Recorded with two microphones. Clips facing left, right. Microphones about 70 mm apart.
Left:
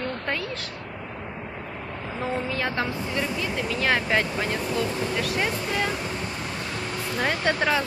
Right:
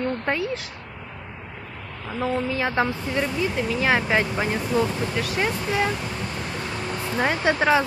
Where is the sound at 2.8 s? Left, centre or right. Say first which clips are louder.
Right 7 dB; right.